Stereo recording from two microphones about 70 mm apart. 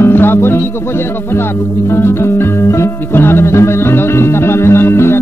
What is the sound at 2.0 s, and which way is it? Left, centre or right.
Music, left.